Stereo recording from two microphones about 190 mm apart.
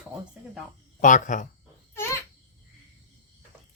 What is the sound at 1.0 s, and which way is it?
Speech, 40° left (ahead or behind).